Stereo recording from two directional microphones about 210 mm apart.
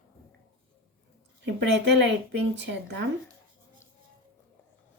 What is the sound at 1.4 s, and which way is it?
Speech, 55° right (ahead or behind).